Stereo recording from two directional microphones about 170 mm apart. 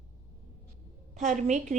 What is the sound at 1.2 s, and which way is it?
Speech, 45° right (ahead or behind).